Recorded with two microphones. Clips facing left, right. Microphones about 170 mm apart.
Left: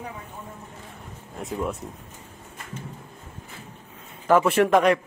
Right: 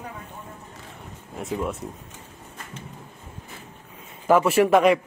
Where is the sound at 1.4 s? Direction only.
Centre (ahead or behind).